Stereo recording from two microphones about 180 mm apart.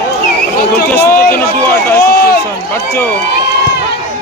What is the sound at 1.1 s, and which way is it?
Speech, 55° left (ahead or behind).